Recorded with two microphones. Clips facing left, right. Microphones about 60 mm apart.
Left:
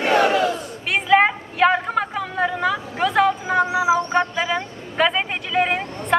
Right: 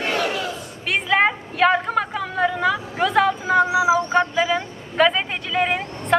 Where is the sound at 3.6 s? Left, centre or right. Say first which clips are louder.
Left 1 dB; centre.